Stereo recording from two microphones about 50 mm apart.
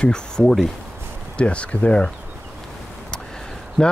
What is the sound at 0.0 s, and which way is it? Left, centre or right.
Speech, centre.